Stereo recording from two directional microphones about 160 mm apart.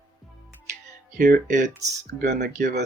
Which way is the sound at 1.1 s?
60° right (ahead or behind).